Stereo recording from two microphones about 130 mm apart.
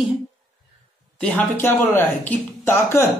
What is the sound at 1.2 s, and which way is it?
A man's voice, 15° left (ahead or behind).